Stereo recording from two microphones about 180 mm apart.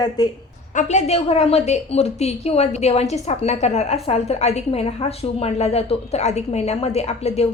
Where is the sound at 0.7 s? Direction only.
40° left (ahead or behind).